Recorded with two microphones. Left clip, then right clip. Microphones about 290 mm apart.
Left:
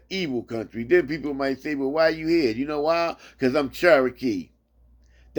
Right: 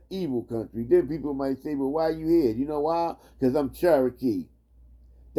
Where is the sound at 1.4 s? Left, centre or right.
Centre.